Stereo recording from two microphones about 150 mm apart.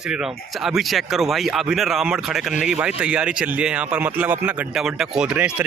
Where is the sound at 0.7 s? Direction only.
Centre (ahead or behind).